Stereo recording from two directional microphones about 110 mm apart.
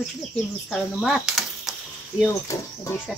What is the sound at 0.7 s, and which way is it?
Speech, centre (ahead or behind).